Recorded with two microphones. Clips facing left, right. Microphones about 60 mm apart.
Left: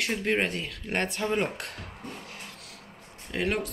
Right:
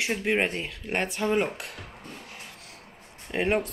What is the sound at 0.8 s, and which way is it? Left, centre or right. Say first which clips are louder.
Speech: right 1 dB; centre.